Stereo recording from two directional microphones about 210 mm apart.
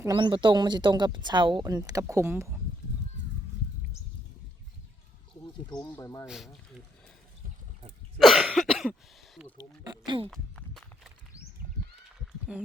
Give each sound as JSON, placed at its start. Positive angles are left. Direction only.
{"t": 0.0, "sound": "speech", "side_deg": -20}
{"t": 5.6, "sound": "speech", "side_deg": 15}
{"t": 6.2, "sound": "speech", "side_deg": 0}
{"t": 8.2, "sound": "throat clearing", "side_deg": 0}
{"t": 9.6, "sound": "a sound", "side_deg": -20}
{"t": 10.2, "sound": "a sound", "side_deg": 5}